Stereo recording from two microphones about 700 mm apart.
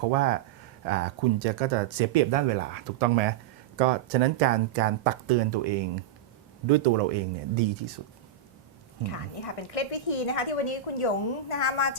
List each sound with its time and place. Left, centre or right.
0.0 s speech: right
9.0 s speech: left